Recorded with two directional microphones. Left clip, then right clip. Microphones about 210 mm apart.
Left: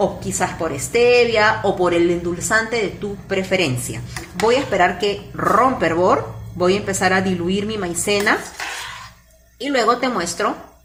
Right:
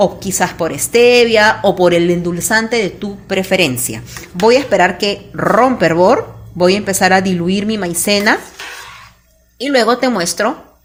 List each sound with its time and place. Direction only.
0.0 s a woman's voice: 50° right (ahead or behind)
9.6 s a woman's voice: 50° right (ahead or behind)